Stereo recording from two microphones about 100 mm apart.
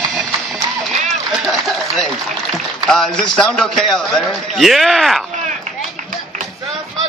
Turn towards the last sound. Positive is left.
turn(degrees=0)  # may be behind; listen again after turning